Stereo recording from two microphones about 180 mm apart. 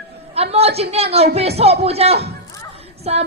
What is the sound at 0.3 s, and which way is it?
Speech, 35° right (ahead or behind).